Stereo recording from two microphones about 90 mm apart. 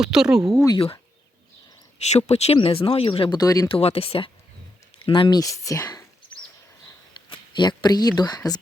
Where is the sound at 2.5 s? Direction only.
90° left.